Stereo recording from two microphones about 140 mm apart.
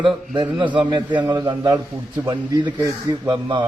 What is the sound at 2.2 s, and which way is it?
A man's voice, 30° right (ahead or behind).